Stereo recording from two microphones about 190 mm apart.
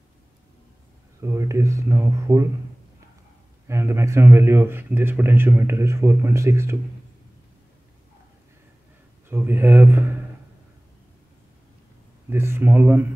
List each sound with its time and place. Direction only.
1.2 s speech: 15° right (ahead or behind)
3.6 s speech: 15° right (ahead or behind)
9.3 s speech: 10° right (ahead or behind)
12.3 s speech: 10° right (ahead or behind)